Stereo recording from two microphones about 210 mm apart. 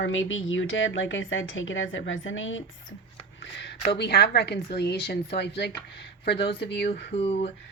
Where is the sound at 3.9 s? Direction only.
50° left (ahead or behind).